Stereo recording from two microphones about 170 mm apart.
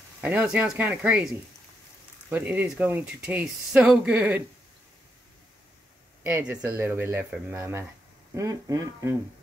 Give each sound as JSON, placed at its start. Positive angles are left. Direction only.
{"t": 0.2, "sound": "speech", "side_deg": -10}
{"t": 6.2, "sound": "speech", "side_deg": -10}